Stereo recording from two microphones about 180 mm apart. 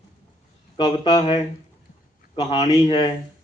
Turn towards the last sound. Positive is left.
turn(degrees=25)  # may be behind; listen again after turning